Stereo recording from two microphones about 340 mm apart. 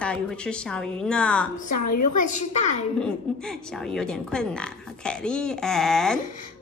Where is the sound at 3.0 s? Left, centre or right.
Centre.